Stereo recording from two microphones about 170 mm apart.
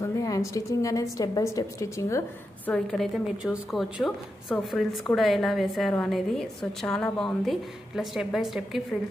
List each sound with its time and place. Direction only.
0.2 s a woman's voice: 20° left (ahead or behind)
2.7 s a woman's voice: centre (ahead or behind)